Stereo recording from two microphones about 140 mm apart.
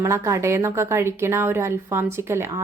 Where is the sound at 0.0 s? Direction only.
20° right (ahead or behind).